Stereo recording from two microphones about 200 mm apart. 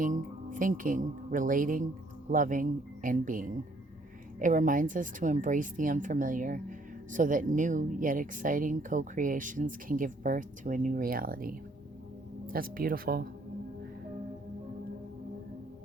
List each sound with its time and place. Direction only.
0.0 s speech: 40° right (ahead or behind)